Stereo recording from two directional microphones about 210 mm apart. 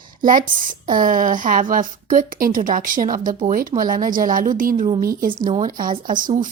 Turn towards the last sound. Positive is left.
turn(degrees=-40)  # may be behind; listen again after turning